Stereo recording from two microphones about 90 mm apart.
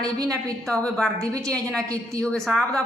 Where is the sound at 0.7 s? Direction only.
5° left (ahead or behind).